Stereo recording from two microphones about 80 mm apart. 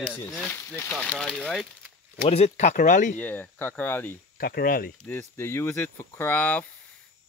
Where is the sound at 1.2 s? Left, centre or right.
Centre.